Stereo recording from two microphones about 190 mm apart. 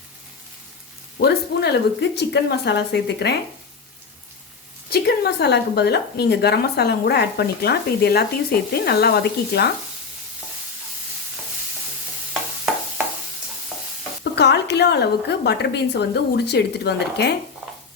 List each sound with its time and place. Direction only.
1.2 s a woman's voice: 60° left (ahead or behind)
4.9 s a woman's voice: 55° left (ahead or behind)
13.7 s stir: 5° right (ahead or behind)
14.3 s a woman's voice: 65° left (ahead or behind)